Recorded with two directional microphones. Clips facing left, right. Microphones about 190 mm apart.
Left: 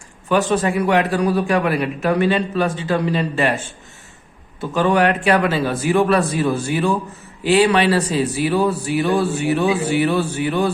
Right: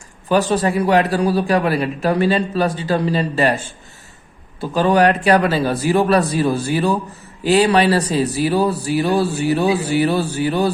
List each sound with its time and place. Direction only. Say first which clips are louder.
0.3 s a man's voice: right 1 dB; 35° right (ahead or behind)
4.6 s a man's voice: right 2 dB; 35° right (ahead or behind)